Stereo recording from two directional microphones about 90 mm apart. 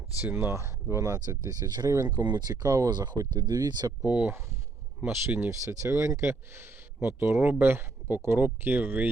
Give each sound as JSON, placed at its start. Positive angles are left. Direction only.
{"t": 0.3, "sound": "speech", "side_deg": -30}
{"t": 2.9, "sound": "speech", "side_deg": -50}
{"t": 4.0, "sound": "speech", "side_deg": -15}